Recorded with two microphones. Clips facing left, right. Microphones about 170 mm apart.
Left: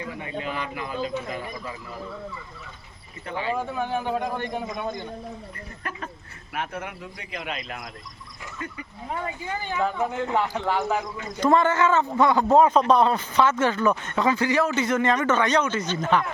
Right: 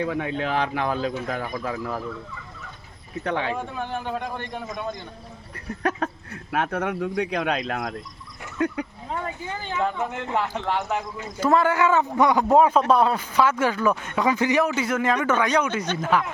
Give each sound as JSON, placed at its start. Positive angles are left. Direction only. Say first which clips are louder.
{"t": 0.0, "sound": "a man's voice", "louder": "right 6 dB", "side_deg": -90}
{"t": 3.2, "sound": "speech", "louder": "right 4 dB", "side_deg": -70}
{"t": 3.5, "sound": "speech", "louder": "left 2 dB", "side_deg": 10}
{"t": 6.0, "sound": "speech", "louder": "right 9 dB", "side_deg": -90}
{"t": 6.5, "sound": "a man's voice", "louder": "right 7 dB", "side_deg": -75}
{"t": 9.2, "sound": "speech", "louder": "left 1 dB", "side_deg": 15}